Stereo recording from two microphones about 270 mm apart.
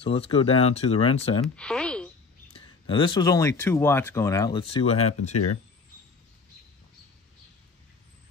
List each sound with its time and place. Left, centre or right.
0.0 s speech: left
1.6 s a sound: centre
2.5 s speech: centre